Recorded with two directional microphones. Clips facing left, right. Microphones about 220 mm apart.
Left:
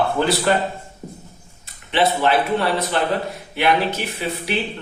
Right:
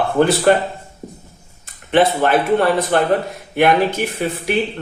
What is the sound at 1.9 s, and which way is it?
Speech, 50° right (ahead or behind).